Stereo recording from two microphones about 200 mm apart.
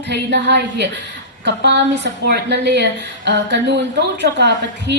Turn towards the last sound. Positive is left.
turn(degrees=-60)  # may be behind; listen again after turning